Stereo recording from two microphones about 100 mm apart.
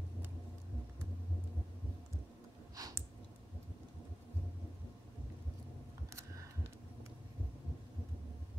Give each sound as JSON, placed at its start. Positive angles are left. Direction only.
{"t": 2.7, "sound": "clicking", "side_deg": -35}